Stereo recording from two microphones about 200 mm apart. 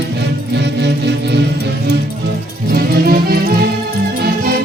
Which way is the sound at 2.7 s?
50° right (ahead or behind).